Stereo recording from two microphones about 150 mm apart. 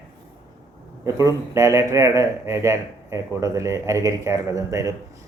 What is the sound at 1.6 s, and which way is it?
Speech, 20° right (ahead or behind).